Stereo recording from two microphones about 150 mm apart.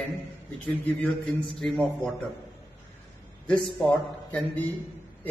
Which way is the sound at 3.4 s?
5° left (ahead or behind).